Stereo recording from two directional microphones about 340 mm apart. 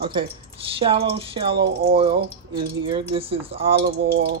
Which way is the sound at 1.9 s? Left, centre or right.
Centre.